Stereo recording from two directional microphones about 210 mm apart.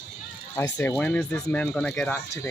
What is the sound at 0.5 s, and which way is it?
Speech, 10° left (ahead or behind).